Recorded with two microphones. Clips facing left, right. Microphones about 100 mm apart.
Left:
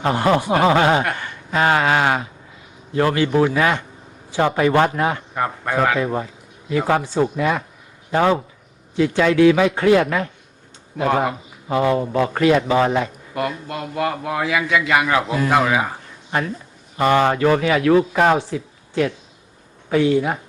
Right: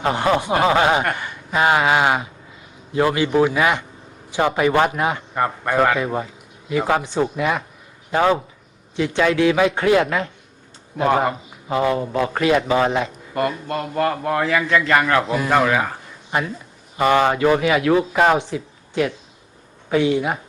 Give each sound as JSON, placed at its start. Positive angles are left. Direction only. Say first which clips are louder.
{"t": 0.0, "sound": "a man's voice", "louder": "left 1 dB", "side_deg": -20}
{"t": 5.3, "sound": "a man's voice", "louder": "right 1 dB", "side_deg": 0}
{"t": 6.7, "sound": "a man's voice", "louder": "left 1 dB", "side_deg": -15}
{"t": 10.9, "sound": "a man's voice", "louder": "right 1 dB", "side_deg": 0}
{"t": 11.8, "sound": "speech", "louder": "left 2 dB", "side_deg": 25}
{"t": 12.8, "sound": "a man's voice", "louder": "left 1 dB", "side_deg": -20}
{"t": 13.3, "sound": "a man's voice", "louder": "right 3 dB", "side_deg": 0}
{"t": 16.3, "sound": "speech", "louder": "even", "side_deg": -15}
{"t": 19.9, "sound": "a man's voice", "louder": "left 1 dB", "side_deg": -20}